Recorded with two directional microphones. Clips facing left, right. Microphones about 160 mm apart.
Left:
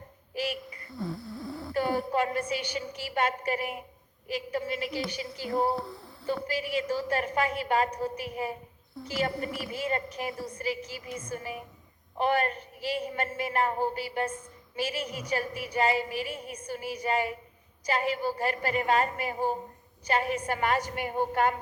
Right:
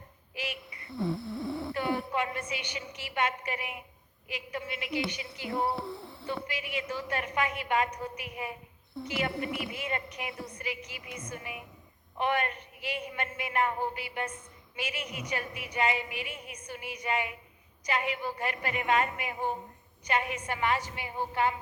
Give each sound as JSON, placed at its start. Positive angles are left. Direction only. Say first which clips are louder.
{"t": 0.3, "sound": "a sound", "louder": "left 6 dB", "side_deg": 35}
{"t": 1.1, "sound": "snoring", "louder": "right 3 dB", "side_deg": -25}
{"t": 1.7, "sound": "speech", "louder": "left 6 dB", "side_deg": 40}
{"t": 5.7, "sound": "speech", "louder": "left 2 dB", "side_deg": 0}
{"t": 6.5, "sound": "speech", "louder": "left 6 dB", "side_deg": 35}